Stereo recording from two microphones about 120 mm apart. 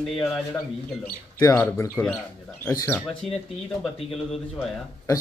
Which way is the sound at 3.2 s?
Centre (ahead or behind).